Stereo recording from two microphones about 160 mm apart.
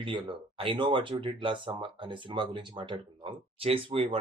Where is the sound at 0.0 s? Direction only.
30° right (ahead or behind).